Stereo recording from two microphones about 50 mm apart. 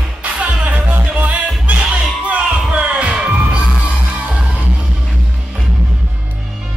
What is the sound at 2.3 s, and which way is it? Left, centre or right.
Music, right.